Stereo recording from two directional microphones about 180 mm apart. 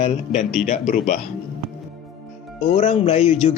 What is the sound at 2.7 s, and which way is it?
Speech, 35° left (ahead or behind).